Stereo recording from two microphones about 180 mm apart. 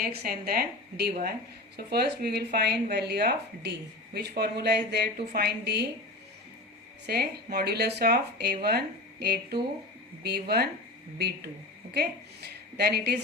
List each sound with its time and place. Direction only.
0.0 s speech: 60° right (ahead or behind)
7.1 s a woman's voice: 60° right (ahead or behind)